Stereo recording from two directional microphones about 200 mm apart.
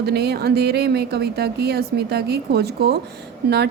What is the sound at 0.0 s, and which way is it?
A woman's voice, 55° right (ahead or behind).